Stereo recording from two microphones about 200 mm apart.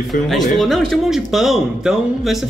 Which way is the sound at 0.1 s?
Centre (ahead or behind).